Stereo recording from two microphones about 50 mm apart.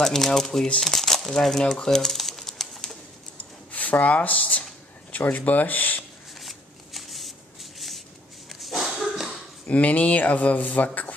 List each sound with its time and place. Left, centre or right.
0.0 s speech: centre
0.8 s crumpling: centre
1.7 s a sound: centre
3.7 s speech: left
6.4 s shuffling cards: centre
8.5 s a sound: centre
9.7 s speech: left